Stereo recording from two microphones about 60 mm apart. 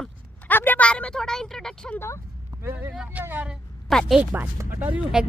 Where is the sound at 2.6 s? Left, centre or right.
Right.